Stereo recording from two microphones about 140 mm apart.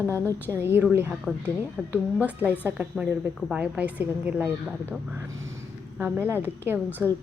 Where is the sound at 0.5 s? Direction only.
15° right (ahead or behind).